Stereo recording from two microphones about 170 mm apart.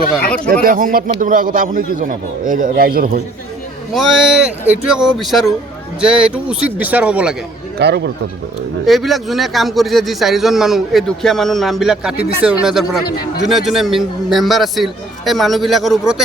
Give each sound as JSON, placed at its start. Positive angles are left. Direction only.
{"t": 0.5, "sound": "a man's voice", "side_deg": -55}
{"t": 3.9, "sound": "speech", "side_deg": 0}
{"t": 7.8, "sound": "speech", "side_deg": -80}
{"t": 8.9, "sound": "speech", "side_deg": 0}